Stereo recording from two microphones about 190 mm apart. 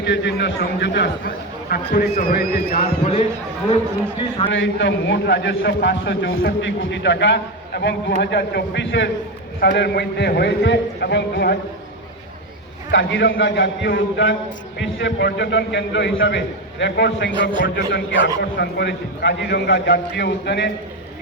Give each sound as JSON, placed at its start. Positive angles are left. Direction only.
{"t": 0.0, "sound": "a man's voice", "side_deg": 65}
{"t": 1.7, "sound": "a man's voice", "side_deg": 50}
{"t": 2.7, "sound": "a man's voice", "side_deg": 35}
{"t": 4.5, "sound": "a man's voice", "side_deg": 80}
{"t": 12.9, "sound": "a man's voice", "side_deg": 75}